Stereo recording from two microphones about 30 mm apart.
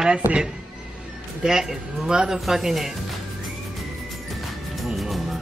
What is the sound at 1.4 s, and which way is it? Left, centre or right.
A man's voice, right.